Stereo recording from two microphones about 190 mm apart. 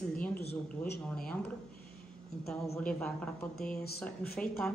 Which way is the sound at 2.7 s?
5° left (ahead or behind).